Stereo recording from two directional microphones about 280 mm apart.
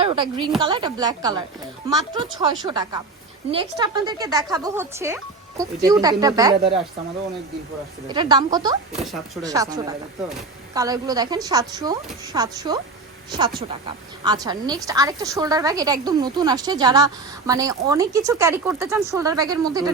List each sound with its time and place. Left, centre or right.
0.0 s a woman's voice: centre
8.0 s a woman's voice: centre
8.9 s speech: centre
9.4 s a woman's voice: centre
14.3 s a woman's voice: centre